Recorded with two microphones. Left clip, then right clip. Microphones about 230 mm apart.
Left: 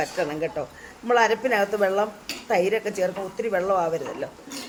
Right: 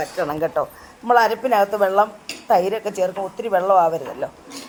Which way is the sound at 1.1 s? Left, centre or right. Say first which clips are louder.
Right 4 dB; centre.